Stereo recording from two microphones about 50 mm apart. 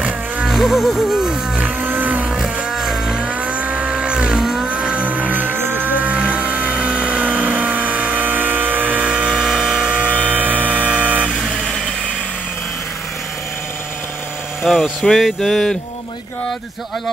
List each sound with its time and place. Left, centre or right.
0.5 s music: centre
1.6 s vehicle: right
2.3 s vehicle: centre
3.3 s vehicle: right
4.6 s vehicle: right
6.1 s a sound: right
9.0 s a sound: centre
9.3 s a sound: centre
9.8 s vehicle: right
11.3 s vehicle: centre
14.7 s speech: centre